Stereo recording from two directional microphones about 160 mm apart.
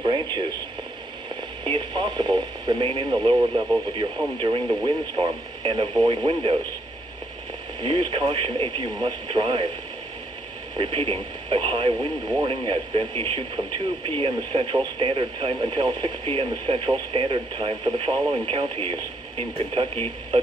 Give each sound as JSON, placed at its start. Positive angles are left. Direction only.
{"t": 0.0, "sound": "speech", "side_deg": -30}
{"t": 7.8, "sound": "speech", "side_deg": -30}
{"t": 10.8, "sound": "speech", "side_deg": -30}